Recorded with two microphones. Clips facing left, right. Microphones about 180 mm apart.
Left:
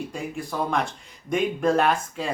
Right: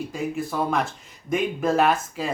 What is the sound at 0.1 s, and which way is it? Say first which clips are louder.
Speech: right 4 dB; 5° right (ahead or behind).